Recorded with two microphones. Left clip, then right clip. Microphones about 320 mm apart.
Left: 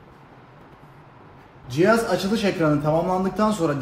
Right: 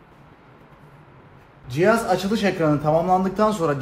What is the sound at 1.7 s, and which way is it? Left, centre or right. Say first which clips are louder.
A man's voice: even; centre.